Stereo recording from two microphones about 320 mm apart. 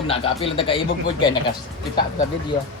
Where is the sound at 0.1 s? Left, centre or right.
Centre.